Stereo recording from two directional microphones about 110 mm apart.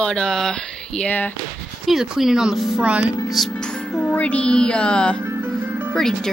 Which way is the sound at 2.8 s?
10° right (ahead or behind).